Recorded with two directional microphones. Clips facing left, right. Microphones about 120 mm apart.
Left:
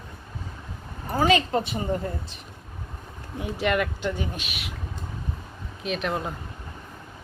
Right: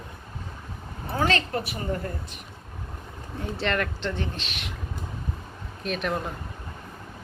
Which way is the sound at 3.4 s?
10° left (ahead or behind).